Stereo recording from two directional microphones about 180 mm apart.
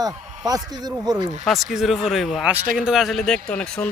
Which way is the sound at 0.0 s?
20° right (ahead or behind).